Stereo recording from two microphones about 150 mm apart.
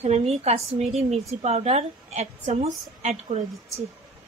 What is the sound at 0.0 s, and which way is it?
Speech, 45° right (ahead or behind).